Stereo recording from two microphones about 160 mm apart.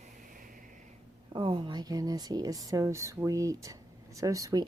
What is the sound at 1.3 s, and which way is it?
Speech, 30° right (ahead or behind).